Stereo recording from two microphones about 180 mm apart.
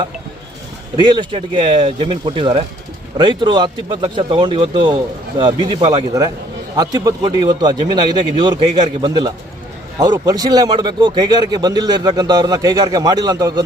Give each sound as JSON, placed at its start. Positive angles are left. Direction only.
{"t": 0.9, "sound": "a man's voice", "side_deg": -25}